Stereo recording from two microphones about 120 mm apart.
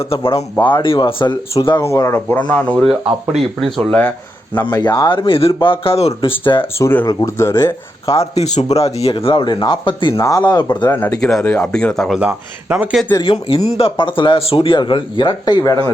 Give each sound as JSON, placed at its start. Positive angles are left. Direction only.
{"t": 0.0, "sound": "speech", "side_deg": 50}
{"t": 1.8, "sound": "speech", "side_deg": 25}
{"t": 2.5, "sound": "speech", "side_deg": 10}
{"t": 3.3, "sound": "speech", "side_deg": 0}
{"t": 4.8, "sound": "speech", "side_deg": 35}
{"t": 6.7, "sound": "speech", "side_deg": 20}
{"t": 8.0, "sound": "speech", "side_deg": 55}
{"t": 10.2, "sound": "speech", "side_deg": 25}
{"t": 10.4, "sound": "speech", "side_deg": 35}
{"t": 10.9, "sound": "speech", "side_deg": 20}
{"t": 11.2, "sound": "speech", "side_deg": 5}
{"t": 11.4, "sound": "speech", "side_deg": 15}
{"t": 12.2, "sound": "speech", "side_deg": -10}
{"t": 13.2, "sound": "speech", "side_deg": 50}